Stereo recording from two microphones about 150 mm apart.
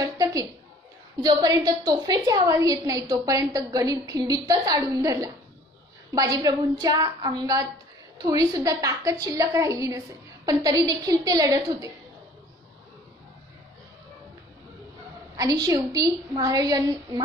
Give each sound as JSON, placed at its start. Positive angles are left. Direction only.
{"t": 0.0, "sound": "a sound", "side_deg": -25}
{"t": 1.2, "sound": "a woman's voice", "side_deg": -25}
{"t": 15.3, "sound": "a woman's voice", "side_deg": -25}